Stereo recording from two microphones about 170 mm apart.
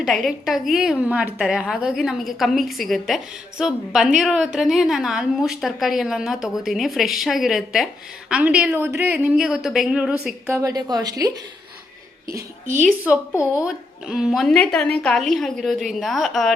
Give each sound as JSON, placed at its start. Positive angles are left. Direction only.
{"t": 0.0, "sound": "a woman's voice", "side_deg": 0}
{"t": 10.4, "sound": "a woman's voice", "side_deg": -20}
{"t": 12.3, "sound": "a woman's voice", "side_deg": -50}
{"t": 13.7, "sound": "a woman's voice", "side_deg": -5}